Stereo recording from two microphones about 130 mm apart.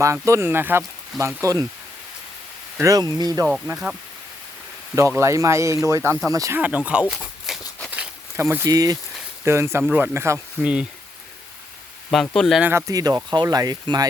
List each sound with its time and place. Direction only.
0.0 s speech: 20° right (ahead or behind)
2.7 s speech: 25° right (ahead or behind)
4.9 s speech: 20° right (ahead or behind)
6.6 s speech: 10° right (ahead or behind)
7.1 s a sound: centre (ahead or behind)
8.4 s speech: 20° right (ahead or behind)
12.1 s speech: 5° left (ahead or behind)
12.9 s speech: 30° right (ahead or behind)